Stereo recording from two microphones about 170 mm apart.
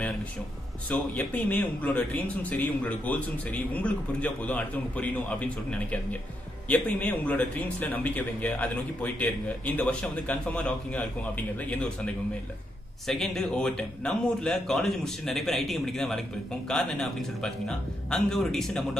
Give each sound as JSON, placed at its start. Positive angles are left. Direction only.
{"t": 1.1, "sound": "a man's voice", "side_deg": 10}